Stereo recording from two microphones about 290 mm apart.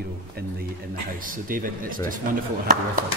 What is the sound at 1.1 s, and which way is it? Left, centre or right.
Speech, right.